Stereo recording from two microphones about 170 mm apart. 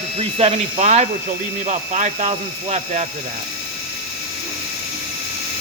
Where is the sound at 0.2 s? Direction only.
40° right (ahead or behind).